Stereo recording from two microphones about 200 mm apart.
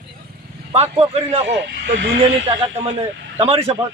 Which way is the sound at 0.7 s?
30° right (ahead or behind).